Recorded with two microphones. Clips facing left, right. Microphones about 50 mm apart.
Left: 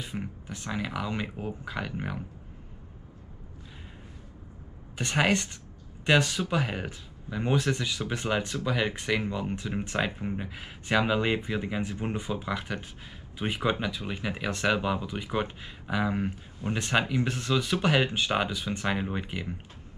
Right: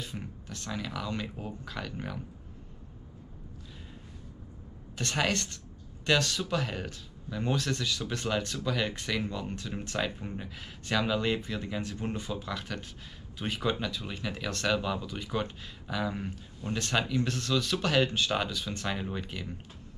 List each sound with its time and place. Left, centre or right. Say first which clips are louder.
0.0 s speech: left 4 dB; centre
4.9 s speech: left 4 dB; centre